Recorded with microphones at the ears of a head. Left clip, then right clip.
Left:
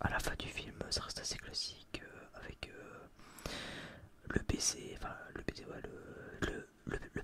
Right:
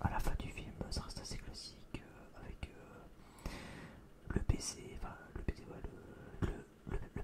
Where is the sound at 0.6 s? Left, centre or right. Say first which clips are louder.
Left 6 dB; left.